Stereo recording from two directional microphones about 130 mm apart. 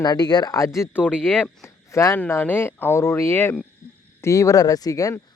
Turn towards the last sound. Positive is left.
turn(degrees=25)  # may be behind; listen again after turning